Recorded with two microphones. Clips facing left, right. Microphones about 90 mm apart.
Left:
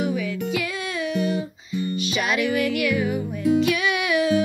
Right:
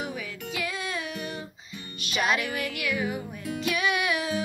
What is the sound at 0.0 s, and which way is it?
Music, 35° right (ahead or behind).